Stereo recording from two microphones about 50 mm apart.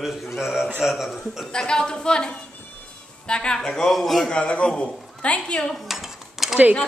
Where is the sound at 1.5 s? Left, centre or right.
Centre.